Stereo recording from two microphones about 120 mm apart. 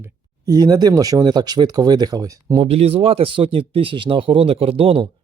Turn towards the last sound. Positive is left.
turn(degrees=-50)  # may be behind; listen again after turning